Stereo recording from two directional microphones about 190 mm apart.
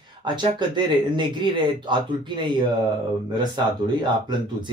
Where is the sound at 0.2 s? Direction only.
25° right (ahead or behind).